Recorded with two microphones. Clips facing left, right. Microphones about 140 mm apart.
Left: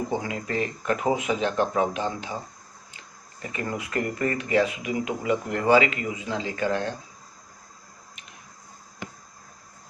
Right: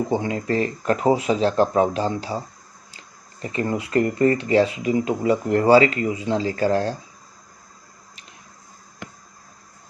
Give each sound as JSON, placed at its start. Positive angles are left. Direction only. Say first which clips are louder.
{"t": 0.1, "sound": "speech", "louder": "right 6 dB", "side_deg": -30}
{"t": 3.4, "sound": "speech", "louder": "right 6 dB", "side_deg": -30}